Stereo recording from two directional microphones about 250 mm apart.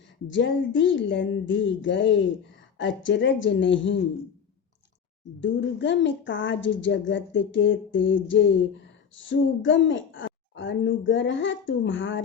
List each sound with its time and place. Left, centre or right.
0.3 s a woman's voice: left
5.4 s a woman's voice: left